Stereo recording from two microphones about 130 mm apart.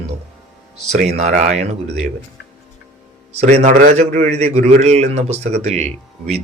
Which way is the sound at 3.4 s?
60° right (ahead or behind).